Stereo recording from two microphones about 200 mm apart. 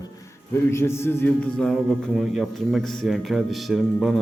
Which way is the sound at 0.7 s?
10° left (ahead or behind).